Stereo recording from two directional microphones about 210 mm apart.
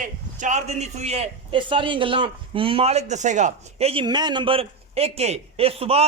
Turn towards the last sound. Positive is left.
turn(degrees=-30)  # may be behind; listen again after turning